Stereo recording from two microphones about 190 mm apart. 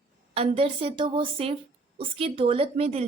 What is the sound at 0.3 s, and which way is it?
A woman's voice, 30° right (ahead or behind).